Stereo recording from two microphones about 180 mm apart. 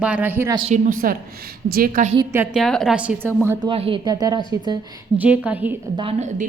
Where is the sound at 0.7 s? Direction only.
50° right (ahead or behind).